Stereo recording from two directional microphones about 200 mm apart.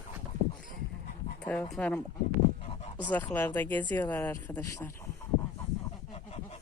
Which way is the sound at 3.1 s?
10° left (ahead or behind).